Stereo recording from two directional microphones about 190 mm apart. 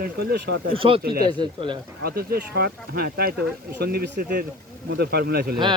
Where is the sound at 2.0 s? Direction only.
55° right (ahead or behind).